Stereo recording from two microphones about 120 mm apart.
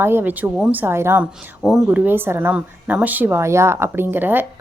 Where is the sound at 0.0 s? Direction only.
20° right (ahead or behind).